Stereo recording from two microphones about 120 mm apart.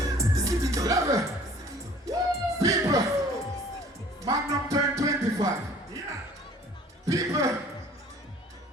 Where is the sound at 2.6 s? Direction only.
30° right (ahead or behind).